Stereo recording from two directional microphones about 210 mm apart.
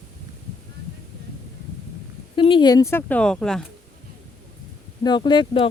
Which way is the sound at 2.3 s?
25° left (ahead or behind).